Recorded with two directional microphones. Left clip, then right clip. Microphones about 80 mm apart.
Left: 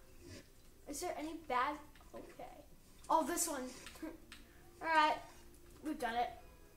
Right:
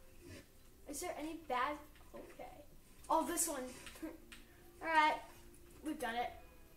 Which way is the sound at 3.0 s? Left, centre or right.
Left.